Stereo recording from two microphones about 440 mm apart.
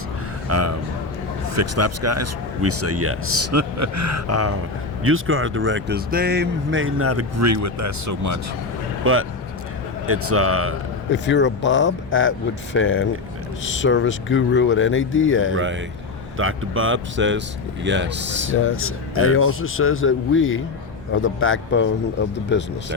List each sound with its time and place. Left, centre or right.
0.4 s a sound: right
1.5 s speech: right
9.0 s speech: right
11.1 s a man's voice: left
15.5 s speech: right
18.5 s a man's voice: left